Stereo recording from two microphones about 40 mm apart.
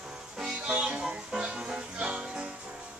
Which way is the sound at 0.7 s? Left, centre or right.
Right.